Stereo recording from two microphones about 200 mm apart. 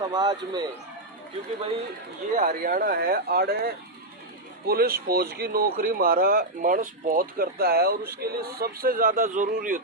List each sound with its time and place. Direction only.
0.1 s speech: 20° right (ahead or behind)
2.3 s speech: 45° right (ahead or behind)